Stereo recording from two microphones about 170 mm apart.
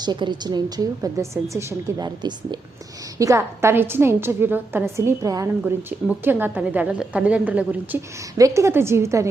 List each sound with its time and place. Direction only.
0.0 s a woman's voice: 25° right (ahead or behind)